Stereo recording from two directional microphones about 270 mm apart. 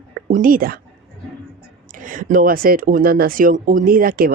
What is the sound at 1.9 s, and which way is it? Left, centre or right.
Speech, right.